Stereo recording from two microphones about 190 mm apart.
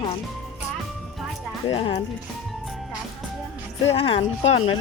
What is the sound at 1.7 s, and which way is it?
Speech, 25° left (ahead or behind).